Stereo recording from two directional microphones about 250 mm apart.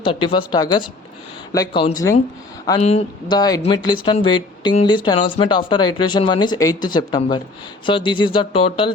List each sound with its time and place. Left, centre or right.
0.0 s speech: left